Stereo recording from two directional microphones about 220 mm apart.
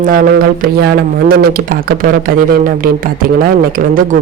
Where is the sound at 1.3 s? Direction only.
45° right (ahead or behind).